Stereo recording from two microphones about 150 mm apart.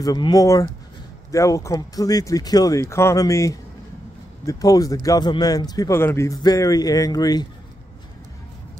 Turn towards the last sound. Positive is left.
turn(degrees=25)  # may be behind; listen again after turning